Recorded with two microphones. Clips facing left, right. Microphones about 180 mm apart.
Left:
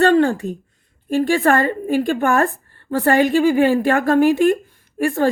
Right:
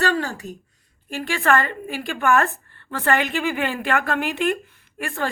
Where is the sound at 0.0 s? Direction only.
55° left (ahead or behind).